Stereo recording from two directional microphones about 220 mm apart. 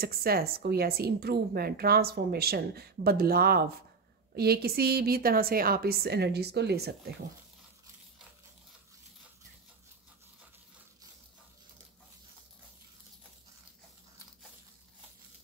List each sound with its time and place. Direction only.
0.0 s a woman's voice: 45° right (ahead or behind)